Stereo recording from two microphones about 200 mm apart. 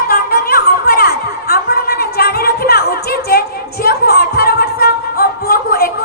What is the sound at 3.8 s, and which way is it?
Music, 50° left (ahead or behind).